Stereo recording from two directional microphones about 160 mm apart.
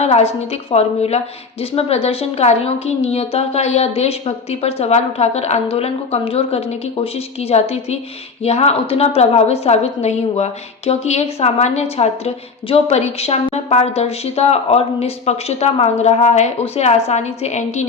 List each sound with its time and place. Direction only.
0.0 s a woman's voice: 40° left (ahead or behind)